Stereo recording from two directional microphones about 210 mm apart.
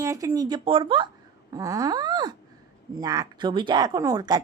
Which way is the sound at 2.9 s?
15° right (ahead or behind).